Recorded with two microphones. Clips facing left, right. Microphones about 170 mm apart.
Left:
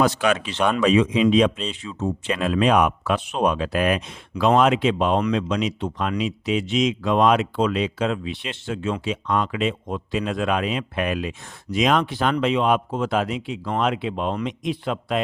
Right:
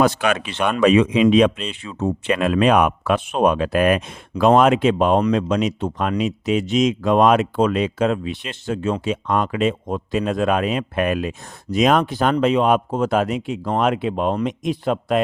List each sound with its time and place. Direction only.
0.0 s speech: 55° right (ahead or behind)